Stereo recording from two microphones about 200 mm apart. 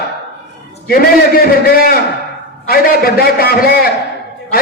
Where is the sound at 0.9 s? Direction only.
50° left (ahead or behind).